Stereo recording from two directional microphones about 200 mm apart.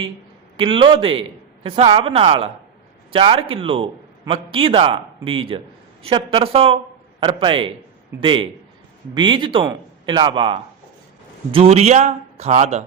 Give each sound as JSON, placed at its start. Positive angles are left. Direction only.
{"t": 0.5, "sound": "a man's voice", "side_deg": -25}